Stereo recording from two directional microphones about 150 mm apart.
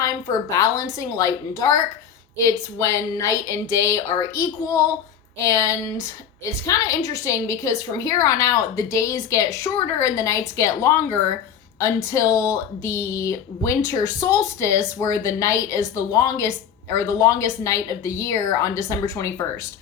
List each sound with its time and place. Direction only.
0.0 s speech: 25° left (ahead or behind)